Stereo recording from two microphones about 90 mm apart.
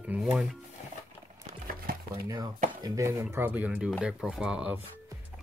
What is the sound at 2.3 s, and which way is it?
Speech, 45° right (ahead or behind).